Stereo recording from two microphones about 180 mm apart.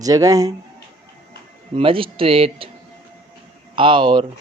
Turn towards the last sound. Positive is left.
turn(degrees=-25)  # may be behind; listen again after turning